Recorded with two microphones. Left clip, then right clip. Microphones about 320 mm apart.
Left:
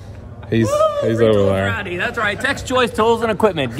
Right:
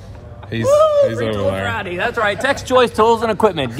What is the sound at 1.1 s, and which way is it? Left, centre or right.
Speech, left.